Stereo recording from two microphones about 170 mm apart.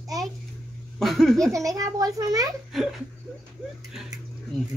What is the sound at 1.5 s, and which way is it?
Speech, 20° right (ahead or behind).